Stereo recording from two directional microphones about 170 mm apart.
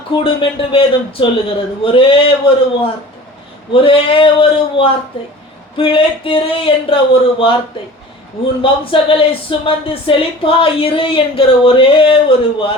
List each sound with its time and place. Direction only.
0.2 s speech: 30° left (ahead or behind)
3.7 s speech: 30° left (ahead or behind)
8.6 s speech: 30° left (ahead or behind)